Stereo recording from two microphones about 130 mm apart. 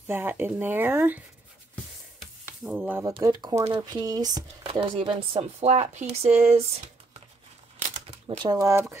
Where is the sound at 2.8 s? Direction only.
20° right (ahead or behind).